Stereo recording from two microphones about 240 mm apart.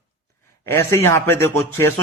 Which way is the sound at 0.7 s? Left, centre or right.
Centre.